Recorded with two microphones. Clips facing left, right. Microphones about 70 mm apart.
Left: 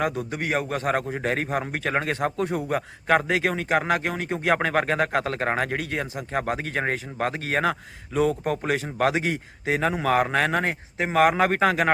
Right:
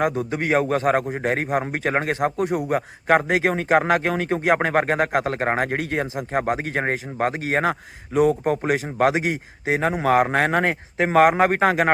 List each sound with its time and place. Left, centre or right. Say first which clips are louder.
0.0 s a man's voice: right 4 dB; right
3.5 s a man's voice: right 5 dB; right
4.4 s speech: right 2 dB; right
11.2 s a man's voice: right 3 dB; right